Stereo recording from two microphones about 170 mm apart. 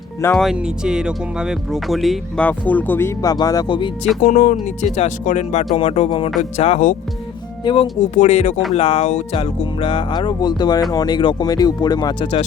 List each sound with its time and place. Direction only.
0.3 s speech: 5° right (ahead or behind); by 3.9 s 30° left (ahead or behind)
4.2 s speech: 50° left (ahead or behind)
7.6 s speech: 30° left (ahead or behind)
8.1 s speech: 40° left (ahead or behind); by 12.4 s 25° left (ahead or behind)